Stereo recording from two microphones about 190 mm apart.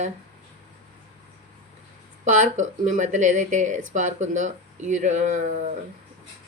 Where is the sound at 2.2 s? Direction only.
40° right (ahead or behind).